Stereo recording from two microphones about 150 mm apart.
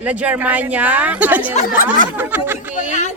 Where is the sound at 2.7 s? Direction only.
55° left (ahead or behind).